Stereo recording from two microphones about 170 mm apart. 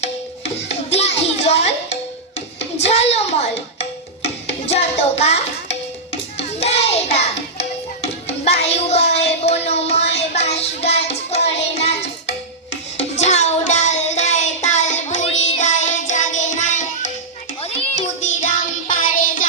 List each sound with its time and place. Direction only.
0.0 s music: 40° left (ahead or behind)
2.8 s a sound: 40° left (ahead or behind)
4.2 s music: 40° left (ahead or behind)
9.2 s child singing: 40° left (ahead or behind)
13.1 s child singing: 40° left (ahead or behind)
15.6 s music: 45° left (ahead or behind)
17.6 s children playing: 35° left (ahead or behind)
18.3 s music: 50° left (ahead or behind)